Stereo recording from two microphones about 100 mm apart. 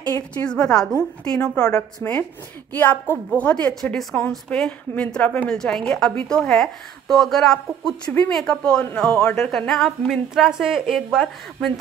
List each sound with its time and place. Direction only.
0.3 s a woman's voice: 10° left (ahead or behind)